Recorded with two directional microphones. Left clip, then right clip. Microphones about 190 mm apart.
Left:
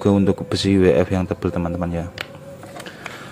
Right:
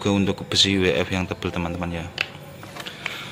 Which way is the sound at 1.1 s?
20° left (ahead or behind).